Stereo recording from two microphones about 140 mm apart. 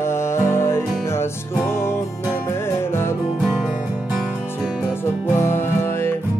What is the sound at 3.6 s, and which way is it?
Music, centre (ahead or behind).